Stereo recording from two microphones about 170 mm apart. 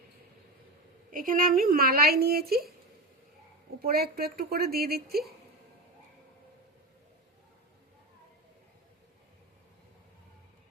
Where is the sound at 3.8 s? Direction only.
65° right (ahead or behind).